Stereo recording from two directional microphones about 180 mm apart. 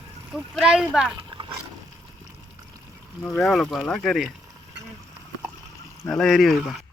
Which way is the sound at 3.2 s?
Centre (ahead or behind).